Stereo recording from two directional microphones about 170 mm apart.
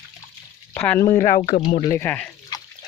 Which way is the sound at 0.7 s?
10° left (ahead or behind).